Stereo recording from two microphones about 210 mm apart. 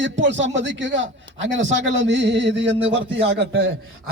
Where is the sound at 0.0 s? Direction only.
60° right (ahead or behind).